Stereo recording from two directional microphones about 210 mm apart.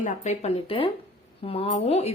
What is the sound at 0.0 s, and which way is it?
Speech, 30° left (ahead or behind).